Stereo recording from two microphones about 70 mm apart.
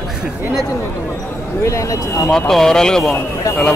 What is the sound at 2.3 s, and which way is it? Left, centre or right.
Speech, centre.